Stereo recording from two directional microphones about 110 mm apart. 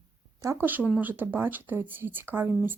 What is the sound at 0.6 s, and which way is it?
Speech, 15° right (ahead or behind).